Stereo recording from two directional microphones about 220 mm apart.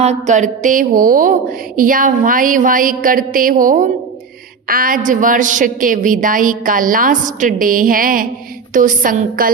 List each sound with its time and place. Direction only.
0.0 s speech: 30° right (ahead or behind)